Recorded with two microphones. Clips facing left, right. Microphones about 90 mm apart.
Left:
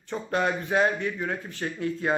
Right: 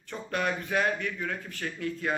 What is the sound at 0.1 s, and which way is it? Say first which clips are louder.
Speech: left 4 dB; 25° left (ahead or behind).